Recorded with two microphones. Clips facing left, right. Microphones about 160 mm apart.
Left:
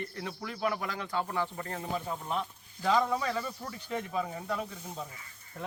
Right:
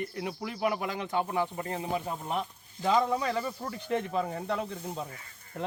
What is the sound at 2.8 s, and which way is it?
Speech, 20° right (ahead or behind).